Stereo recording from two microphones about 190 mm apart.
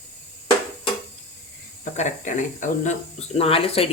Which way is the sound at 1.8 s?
40° left (ahead or behind).